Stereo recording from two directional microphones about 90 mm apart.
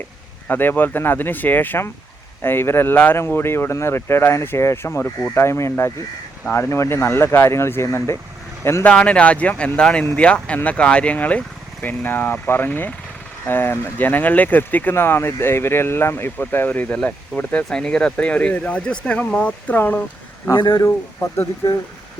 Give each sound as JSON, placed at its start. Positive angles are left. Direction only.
{"t": 0.4, "sound": "speech", "side_deg": 20}
{"t": 8.8, "sound": "speech", "side_deg": 10}
{"t": 20.5, "sound": "speech", "side_deg": 60}
{"t": 20.7, "sound": "speech", "side_deg": 30}